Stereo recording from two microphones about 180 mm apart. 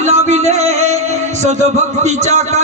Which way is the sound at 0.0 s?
40° right (ahead or behind).